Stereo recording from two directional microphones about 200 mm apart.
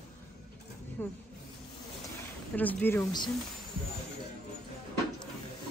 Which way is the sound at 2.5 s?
10° left (ahead or behind).